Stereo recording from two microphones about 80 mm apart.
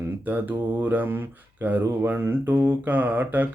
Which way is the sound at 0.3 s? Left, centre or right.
Right.